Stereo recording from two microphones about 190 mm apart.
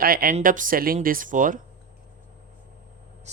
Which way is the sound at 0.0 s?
50° right (ahead or behind).